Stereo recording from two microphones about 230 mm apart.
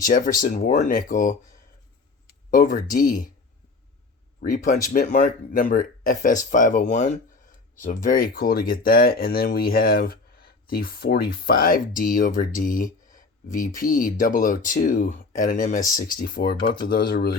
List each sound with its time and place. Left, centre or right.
0.0 s speech: left
4.4 s speech: left